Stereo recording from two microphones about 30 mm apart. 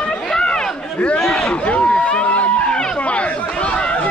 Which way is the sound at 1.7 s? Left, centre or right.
Left.